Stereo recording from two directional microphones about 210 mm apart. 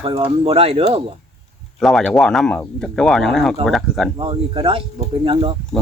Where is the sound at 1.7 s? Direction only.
Centre (ahead or behind).